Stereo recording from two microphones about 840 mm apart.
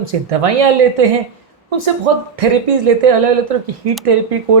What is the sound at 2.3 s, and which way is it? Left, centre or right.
A woman's voice, right.